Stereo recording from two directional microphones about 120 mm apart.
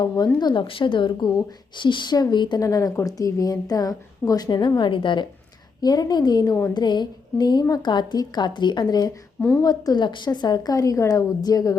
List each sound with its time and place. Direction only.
0.3 s a woman's voice: 40° left (ahead or behind)